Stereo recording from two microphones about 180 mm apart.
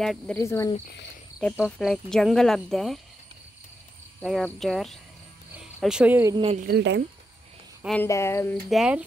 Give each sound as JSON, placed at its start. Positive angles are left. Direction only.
{"t": 0.0, "sound": "speech", "side_deg": 0}
{"t": 0.4, "sound": "speech", "side_deg": 15}
{"t": 1.4, "sound": "speech", "side_deg": 0}
{"t": 4.2, "sound": "speech", "side_deg": 5}
{"t": 6.3, "sound": "speech", "side_deg": -30}
{"t": 6.6, "sound": "speech", "side_deg": -70}
{"t": 7.8, "sound": "speech", "side_deg": 5}
{"t": 8.6, "sound": "speech", "side_deg": -5}